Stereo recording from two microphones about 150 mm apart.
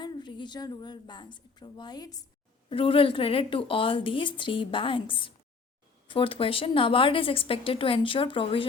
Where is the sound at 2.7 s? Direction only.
35° left (ahead or behind).